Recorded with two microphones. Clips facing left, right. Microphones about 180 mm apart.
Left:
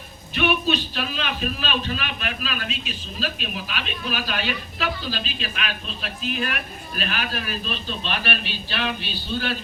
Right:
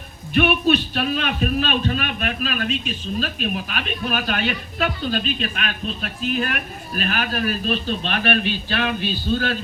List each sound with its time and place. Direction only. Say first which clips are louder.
0.3 s a man's voice: right 5 dB; 50° right (ahead or behind)